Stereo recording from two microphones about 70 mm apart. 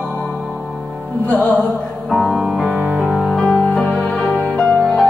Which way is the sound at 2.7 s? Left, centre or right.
Centre.